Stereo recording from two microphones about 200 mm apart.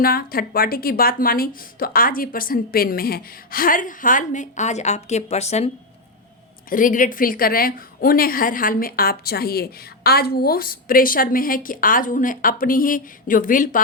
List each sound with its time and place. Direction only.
0.0 s a woman's voice: 45° left (ahead or behind)